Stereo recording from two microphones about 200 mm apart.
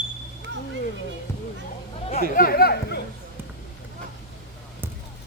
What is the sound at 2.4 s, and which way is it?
Speech, 50° left (ahead or behind).